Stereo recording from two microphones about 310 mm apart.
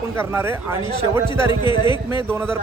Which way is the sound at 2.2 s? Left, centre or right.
Centre.